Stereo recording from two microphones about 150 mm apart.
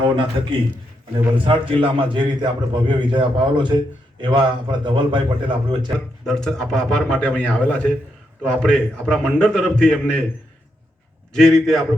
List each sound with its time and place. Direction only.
0.0 s a man's voice: 35° right (ahead or behind)
1.8 s a man's voice: 35° right (ahead or behind)
6.2 s a man's voice: 5° left (ahead or behind)
11.3 s a man's voice: centre (ahead or behind)